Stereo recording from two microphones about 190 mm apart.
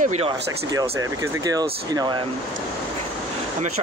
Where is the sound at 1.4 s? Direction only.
20° right (ahead or behind).